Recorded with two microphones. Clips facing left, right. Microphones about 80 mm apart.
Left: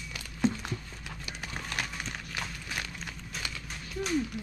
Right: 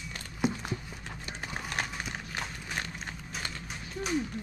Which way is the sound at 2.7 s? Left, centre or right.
Right.